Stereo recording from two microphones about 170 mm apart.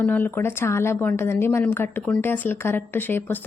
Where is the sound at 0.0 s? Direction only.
10° left (ahead or behind).